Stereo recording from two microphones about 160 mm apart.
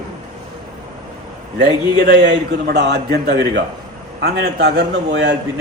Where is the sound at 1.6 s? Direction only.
90° right.